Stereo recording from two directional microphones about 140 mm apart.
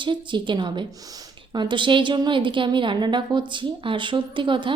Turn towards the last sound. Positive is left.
turn(degrees=-35)  # may be behind; listen again after turning